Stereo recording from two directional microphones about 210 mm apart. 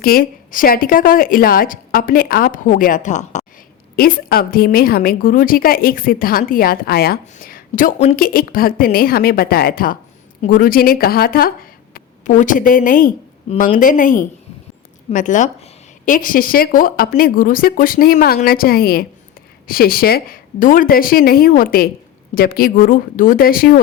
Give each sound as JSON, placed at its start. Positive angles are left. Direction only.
{"t": 0.0, "sound": "a woman's voice", "side_deg": 45}
{"t": 3.9, "sound": "a woman's voice", "side_deg": 45}